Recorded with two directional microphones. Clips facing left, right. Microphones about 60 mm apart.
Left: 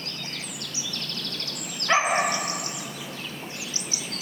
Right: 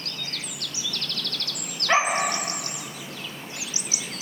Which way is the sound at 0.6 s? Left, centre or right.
Left.